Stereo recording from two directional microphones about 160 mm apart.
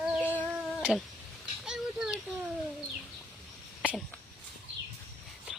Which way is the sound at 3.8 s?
5° left (ahead or behind).